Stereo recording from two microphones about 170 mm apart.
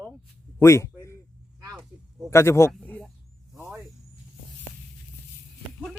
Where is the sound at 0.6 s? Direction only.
15° left (ahead or behind).